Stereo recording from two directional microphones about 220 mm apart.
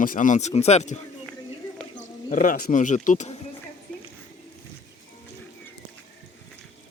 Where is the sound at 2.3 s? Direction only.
35° left (ahead or behind).